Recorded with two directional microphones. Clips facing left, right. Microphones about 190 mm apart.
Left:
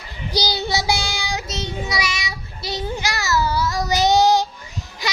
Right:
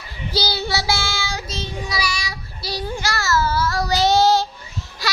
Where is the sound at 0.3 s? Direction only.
15° left (ahead or behind).